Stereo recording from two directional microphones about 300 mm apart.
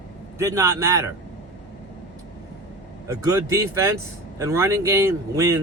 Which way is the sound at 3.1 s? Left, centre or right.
Centre.